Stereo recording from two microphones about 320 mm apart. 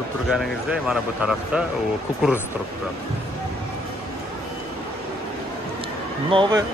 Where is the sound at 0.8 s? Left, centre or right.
Centre.